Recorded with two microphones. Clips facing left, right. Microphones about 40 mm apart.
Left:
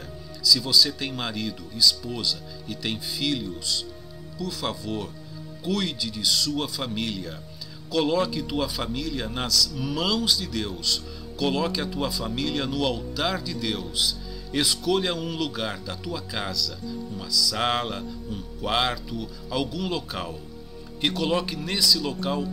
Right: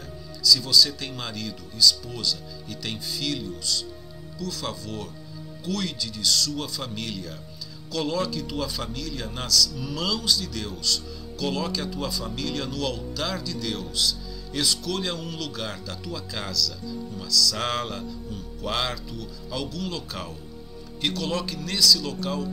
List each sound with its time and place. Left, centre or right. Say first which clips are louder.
0.4 s a man's voice: right 1 dB; centre